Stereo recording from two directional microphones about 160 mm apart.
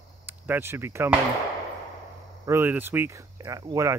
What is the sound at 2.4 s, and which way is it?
Speech, 15° right (ahead or behind).